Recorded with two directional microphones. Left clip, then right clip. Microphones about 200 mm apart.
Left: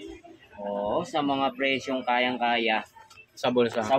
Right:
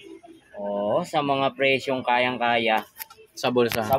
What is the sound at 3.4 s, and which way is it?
Speech, 20° right (ahead or behind).